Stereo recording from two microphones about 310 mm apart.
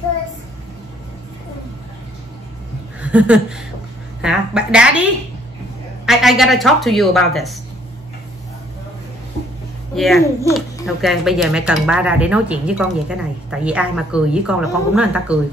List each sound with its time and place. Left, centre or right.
3.0 s a sound: centre
4.2 s speech: centre
6.0 s speech: centre
9.9 s speech: centre